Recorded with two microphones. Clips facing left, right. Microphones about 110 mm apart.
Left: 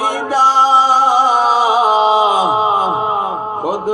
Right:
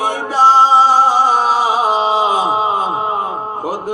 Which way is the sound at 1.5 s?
20° left (ahead or behind).